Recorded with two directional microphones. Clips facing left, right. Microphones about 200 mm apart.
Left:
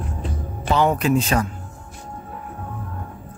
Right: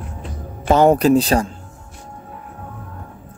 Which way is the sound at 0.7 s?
45° right (ahead or behind).